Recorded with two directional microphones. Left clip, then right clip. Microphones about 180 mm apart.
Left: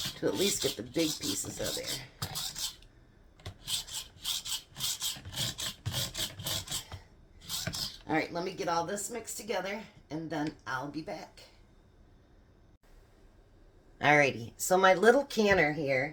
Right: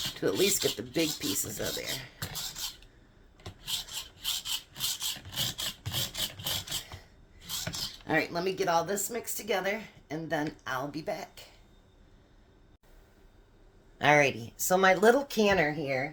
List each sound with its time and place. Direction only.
0.3 s speech: centre (ahead or behind)
2.1 s a sound: 5° left (ahead or behind)
3.4 s rub: 5° left (ahead or behind)
7.4 s a sound: 5° left (ahead or behind)
8.0 s a woman's voice: 45° right (ahead or behind)
14.0 s speech: 20° right (ahead or behind)